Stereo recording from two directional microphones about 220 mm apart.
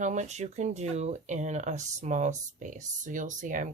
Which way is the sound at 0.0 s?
35° right (ahead or behind).